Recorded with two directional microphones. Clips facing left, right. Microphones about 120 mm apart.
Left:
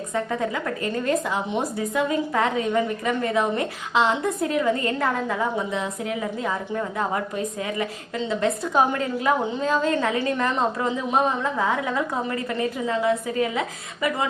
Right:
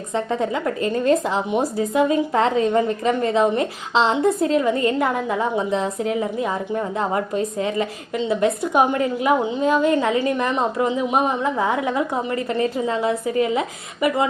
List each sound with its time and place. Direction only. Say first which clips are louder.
0.1 s a woman's voice: right 4 dB; 25° right (ahead or behind)
5.7 s a woman's voice: right 6 dB; 30° right (ahead or behind)